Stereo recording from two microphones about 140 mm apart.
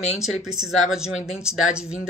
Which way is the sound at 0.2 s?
5° right (ahead or behind).